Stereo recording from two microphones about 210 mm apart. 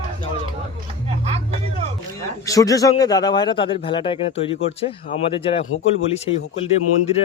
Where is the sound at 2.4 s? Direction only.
15° left (ahead or behind).